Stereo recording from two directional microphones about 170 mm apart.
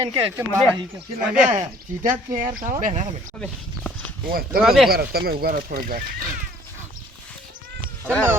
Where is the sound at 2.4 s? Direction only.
55° right (ahead or behind).